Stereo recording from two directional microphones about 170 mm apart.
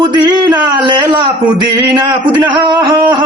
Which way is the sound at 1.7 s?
20° right (ahead or behind).